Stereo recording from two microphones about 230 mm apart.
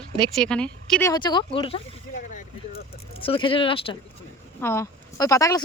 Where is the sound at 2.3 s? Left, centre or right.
Left.